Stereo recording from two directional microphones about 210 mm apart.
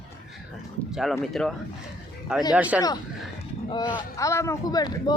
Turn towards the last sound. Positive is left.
turn(degrees=20)  # may be behind; listen again after turning